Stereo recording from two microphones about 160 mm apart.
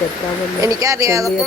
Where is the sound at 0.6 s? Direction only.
20° right (ahead or behind).